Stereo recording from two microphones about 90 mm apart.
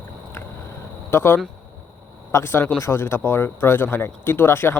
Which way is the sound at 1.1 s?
25° left (ahead or behind).